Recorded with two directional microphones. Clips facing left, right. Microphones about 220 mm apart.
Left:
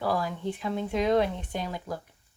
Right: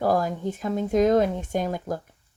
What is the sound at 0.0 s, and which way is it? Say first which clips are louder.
Speech: right 5 dB; 45° right (ahead or behind).